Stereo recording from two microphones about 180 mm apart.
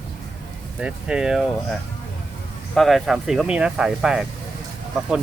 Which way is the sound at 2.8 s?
Centre (ahead or behind).